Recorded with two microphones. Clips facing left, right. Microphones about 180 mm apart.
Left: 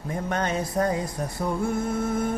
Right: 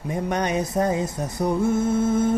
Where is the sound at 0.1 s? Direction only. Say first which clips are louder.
Right 3 dB; 15° right (ahead or behind).